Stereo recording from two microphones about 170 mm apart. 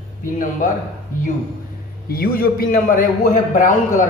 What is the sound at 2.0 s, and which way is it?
A man's voice, 60° left (ahead or behind).